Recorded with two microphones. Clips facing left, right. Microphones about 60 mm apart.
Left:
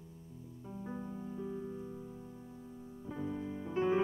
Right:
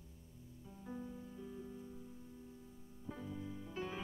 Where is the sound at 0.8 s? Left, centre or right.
Left.